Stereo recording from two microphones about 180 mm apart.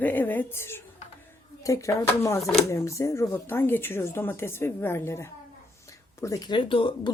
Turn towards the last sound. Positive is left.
turn(degrees=30)  # may be behind; listen again after turning